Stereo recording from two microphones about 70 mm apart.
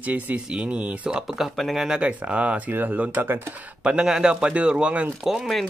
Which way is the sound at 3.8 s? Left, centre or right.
Centre.